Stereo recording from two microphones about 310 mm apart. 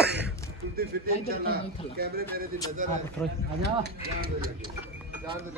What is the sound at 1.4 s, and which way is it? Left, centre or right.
Speech, right.